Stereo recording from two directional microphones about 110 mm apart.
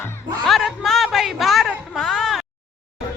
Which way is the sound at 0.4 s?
Centre (ahead or behind).